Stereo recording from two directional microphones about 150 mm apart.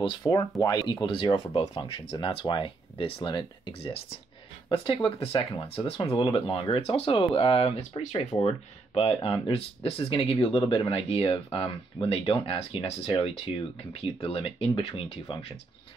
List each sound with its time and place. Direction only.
0.0 s speech: 30° left (ahead or behind)